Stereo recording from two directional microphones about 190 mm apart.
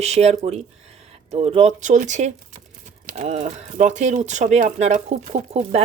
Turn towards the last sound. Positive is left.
turn(degrees=-35)  # may be behind; listen again after turning